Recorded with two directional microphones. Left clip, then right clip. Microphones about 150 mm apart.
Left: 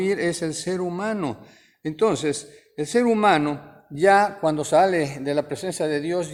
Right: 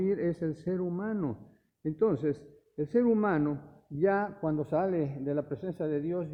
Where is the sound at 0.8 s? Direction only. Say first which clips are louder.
Left 8 dB; 20° left (ahead or behind).